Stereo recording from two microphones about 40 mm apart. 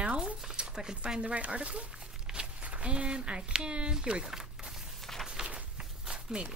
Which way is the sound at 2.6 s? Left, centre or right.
Right.